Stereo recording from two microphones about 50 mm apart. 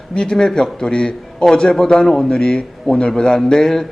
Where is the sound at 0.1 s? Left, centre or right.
Centre.